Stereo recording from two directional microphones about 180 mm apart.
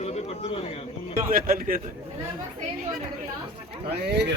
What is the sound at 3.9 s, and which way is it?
Speech, 65° right (ahead or behind).